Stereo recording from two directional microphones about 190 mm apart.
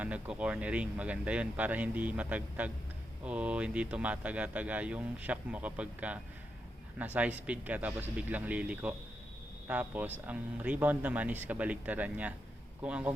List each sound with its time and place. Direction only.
0.0 s a man's voice: 5° right (ahead or behind)